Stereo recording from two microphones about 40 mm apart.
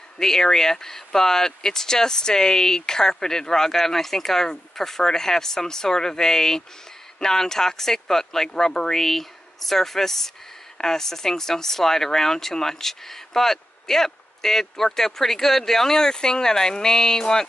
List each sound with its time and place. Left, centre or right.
0.2 s speech: centre
9.0 s speech: centre